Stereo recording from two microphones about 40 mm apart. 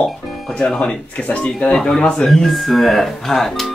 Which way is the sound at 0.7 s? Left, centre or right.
Left.